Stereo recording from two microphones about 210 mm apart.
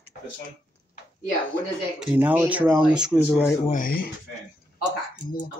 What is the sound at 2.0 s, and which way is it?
Speech, 5° right (ahead or behind).